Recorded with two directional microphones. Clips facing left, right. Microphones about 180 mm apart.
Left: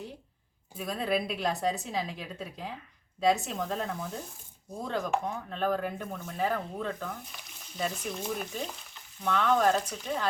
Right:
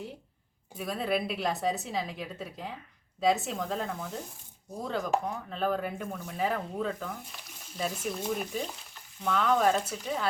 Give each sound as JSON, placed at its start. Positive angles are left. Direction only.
{"t": 0.7, "sound": "a woman's voice", "side_deg": 0}